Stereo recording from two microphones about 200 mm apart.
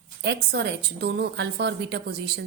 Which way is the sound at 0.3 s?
60° right (ahead or behind).